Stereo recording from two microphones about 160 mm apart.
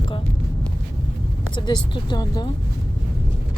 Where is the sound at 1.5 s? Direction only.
30° left (ahead or behind).